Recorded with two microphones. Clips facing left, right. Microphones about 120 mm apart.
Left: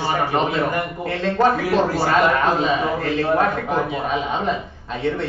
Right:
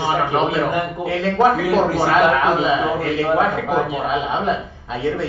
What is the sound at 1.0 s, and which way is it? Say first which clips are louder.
A man's voice: right 2 dB; 5° right (ahead or behind).